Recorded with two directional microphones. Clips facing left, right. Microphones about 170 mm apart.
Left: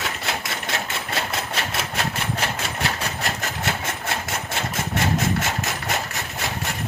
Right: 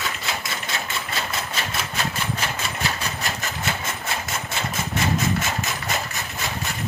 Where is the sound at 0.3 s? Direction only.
70° left (ahead or behind).